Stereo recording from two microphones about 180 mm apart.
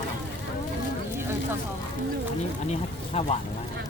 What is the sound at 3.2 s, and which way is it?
Speech, 35° left (ahead or behind).